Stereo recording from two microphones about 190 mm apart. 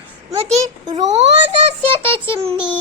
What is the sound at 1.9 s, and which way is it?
Speech, 30° right (ahead or behind).